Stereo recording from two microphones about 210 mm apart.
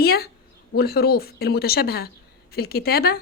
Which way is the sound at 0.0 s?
50° left (ahead or behind).